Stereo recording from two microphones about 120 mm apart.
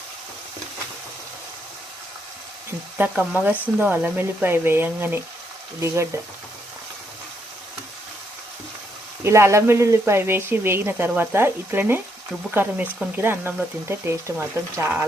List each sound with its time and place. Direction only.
3.0 s a woman's voice: 15° right (ahead or behind)
9.2 s a woman's voice: 25° right (ahead or behind)